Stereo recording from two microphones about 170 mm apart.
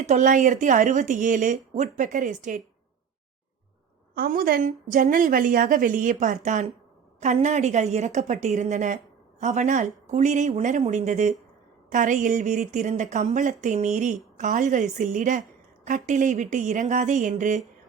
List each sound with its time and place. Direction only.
0.0 s a woman's voice: 45° right (ahead or behind)
4.1 s a woman's voice: 60° right (ahead or behind)